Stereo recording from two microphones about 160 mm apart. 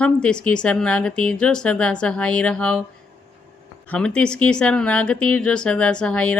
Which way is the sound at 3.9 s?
5° left (ahead or behind).